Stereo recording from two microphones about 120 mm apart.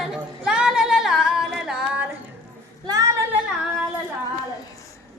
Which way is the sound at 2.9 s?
30° right (ahead or behind).